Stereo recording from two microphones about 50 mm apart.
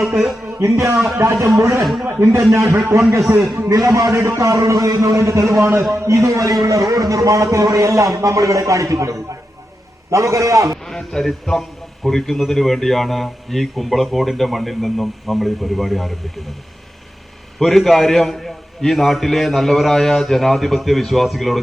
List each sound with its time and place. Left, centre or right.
0.6 s a man's voice: right
0.9 s a man's voice: centre
1.2 s a man's voice: right
1.8 s a man's voice: centre
2.5 s a man's voice: right
3.5 s a man's voice: right
10.8 s a man's voice: centre
17.6 s a man's voice: centre